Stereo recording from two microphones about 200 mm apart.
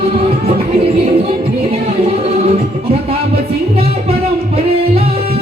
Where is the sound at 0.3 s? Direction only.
30° right (ahead or behind).